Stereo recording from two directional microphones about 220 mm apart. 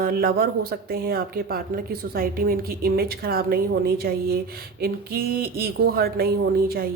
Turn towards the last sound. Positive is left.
turn(degrees=-45)  # may be behind; listen again after turning